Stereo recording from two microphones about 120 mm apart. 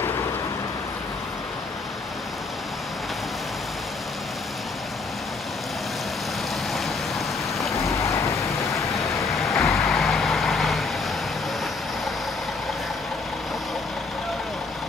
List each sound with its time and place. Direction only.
7.8 s boat: 25° left (ahead or behind)
9.4 s vehicle: centre (ahead or behind)